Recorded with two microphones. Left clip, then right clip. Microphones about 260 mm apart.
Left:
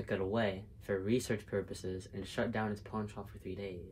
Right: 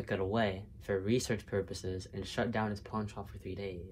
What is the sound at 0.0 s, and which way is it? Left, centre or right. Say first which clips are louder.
Speech: right 2 dB; right.